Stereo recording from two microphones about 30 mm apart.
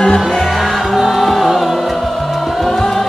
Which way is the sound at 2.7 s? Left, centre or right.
Centre.